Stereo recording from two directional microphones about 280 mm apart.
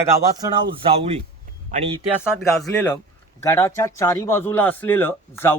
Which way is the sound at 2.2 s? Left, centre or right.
Centre.